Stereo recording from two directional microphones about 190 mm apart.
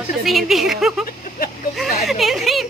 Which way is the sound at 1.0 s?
50° left (ahead or behind).